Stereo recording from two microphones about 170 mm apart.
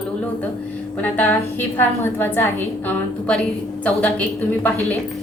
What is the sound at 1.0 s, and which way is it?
A woman's voice, 10° left (ahead or behind).